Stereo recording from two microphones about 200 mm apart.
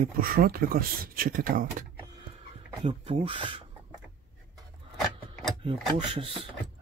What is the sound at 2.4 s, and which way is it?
Speech, 30° right (ahead or behind).